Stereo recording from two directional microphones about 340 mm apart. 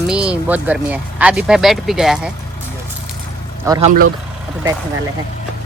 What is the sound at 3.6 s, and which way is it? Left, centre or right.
Speech, centre.